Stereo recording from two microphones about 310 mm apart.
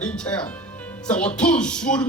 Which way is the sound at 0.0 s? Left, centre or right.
Centre.